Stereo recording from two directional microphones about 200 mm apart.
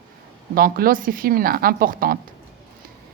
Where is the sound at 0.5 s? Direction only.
45° right (ahead or behind).